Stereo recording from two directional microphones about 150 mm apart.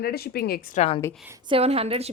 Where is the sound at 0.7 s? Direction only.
45° left (ahead or behind).